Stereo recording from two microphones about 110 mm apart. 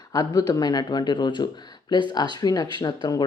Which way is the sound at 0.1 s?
35° left (ahead or behind).